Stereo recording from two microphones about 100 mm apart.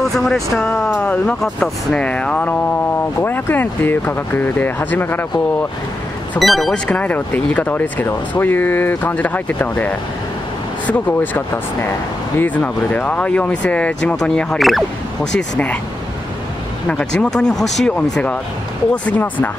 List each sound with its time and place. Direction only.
0.0 s speech: 5° left (ahead or behind)
1.4 s speech: 5° left (ahead or behind)
6.4 s speech: centre (ahead or behind)
6.9 s speech: 15° left (ahead or behind)
15.5 s speech: 10° left (ahead or behind)
16.9 s speech: 5° left (ahead or behind)